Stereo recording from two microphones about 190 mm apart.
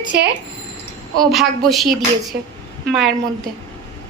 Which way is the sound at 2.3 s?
60° right (ahead or behind).